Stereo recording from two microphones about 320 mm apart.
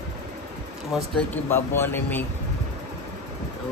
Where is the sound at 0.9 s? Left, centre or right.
Centre.